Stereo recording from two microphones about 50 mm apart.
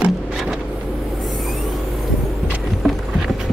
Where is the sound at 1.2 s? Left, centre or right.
Centre.